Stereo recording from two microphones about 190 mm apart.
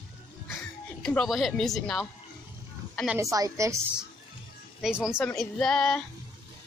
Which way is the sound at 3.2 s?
15° right (ahead or behind).